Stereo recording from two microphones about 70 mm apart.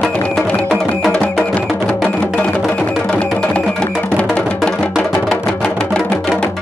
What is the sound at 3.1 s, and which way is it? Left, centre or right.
Music, centre.